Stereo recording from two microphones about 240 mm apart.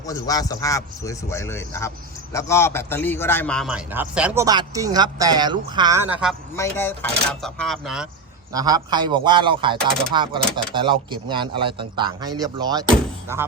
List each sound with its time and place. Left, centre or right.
0.0 s a man's voice: centre
6.6 s speech: centre
8.5 s speech: centre